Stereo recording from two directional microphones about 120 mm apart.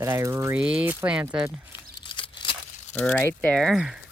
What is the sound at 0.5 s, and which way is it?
Speech, 10° right (ahead or behind).